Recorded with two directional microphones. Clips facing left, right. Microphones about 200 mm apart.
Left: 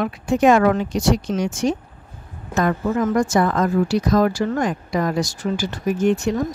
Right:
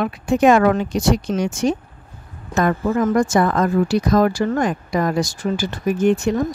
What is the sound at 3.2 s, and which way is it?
Speech, 55° right (ahead or behind).